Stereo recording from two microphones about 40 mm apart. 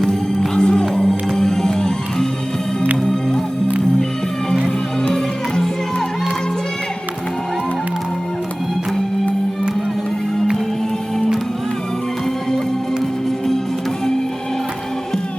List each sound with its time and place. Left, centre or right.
0.1 s music: centre